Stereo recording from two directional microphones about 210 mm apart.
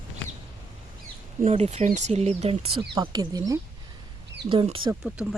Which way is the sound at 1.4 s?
35° right (ahead or behind).